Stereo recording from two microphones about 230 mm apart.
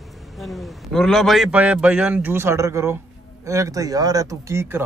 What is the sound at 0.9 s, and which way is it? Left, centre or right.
Speech, centre.